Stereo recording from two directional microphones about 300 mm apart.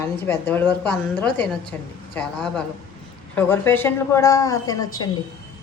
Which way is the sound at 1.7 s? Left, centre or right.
Centre.